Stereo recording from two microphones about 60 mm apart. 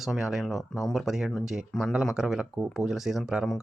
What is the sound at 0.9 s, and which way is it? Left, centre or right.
Speech, centre.